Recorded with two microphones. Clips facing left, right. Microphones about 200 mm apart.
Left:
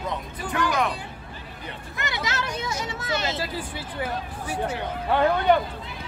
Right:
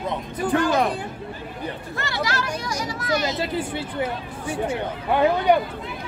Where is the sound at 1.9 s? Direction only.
20° left (ahead or behind).